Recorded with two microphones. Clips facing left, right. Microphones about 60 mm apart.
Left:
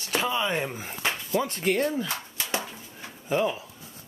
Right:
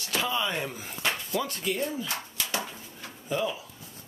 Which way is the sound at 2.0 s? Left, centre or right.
Left.